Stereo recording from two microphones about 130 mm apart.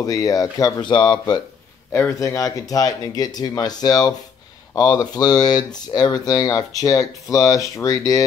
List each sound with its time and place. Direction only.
0.0 s speech: 30° left (ahead or behind)
1.9 s speech: 20° left (ahead or behind)